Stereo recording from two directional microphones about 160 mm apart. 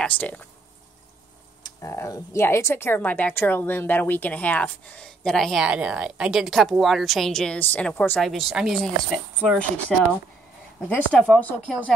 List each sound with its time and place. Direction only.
0.0 s speech: 10° left (ahead or behind)
1.6 s speech: 20° left (ahead or behind)
8.2 s speech: centre (ahead or behind)